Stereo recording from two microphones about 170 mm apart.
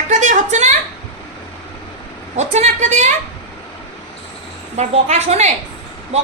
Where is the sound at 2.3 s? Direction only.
40° right (ahead or behind).